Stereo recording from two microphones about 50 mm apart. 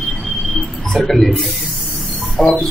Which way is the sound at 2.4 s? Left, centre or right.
Left.